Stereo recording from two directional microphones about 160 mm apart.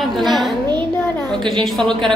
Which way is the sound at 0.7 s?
25° right (ahead or behind).